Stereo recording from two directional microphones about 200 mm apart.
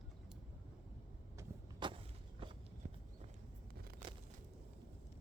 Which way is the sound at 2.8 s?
40° right (ahead or behind).